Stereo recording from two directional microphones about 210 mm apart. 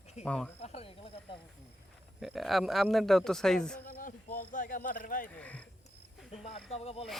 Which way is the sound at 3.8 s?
40° left (ahead or behind).